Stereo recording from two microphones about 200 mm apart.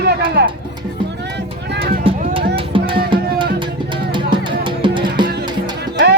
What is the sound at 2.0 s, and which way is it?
Music, 30° right (ahead or behind).